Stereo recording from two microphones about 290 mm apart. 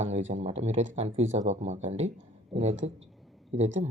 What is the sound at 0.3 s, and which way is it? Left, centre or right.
Speech, right.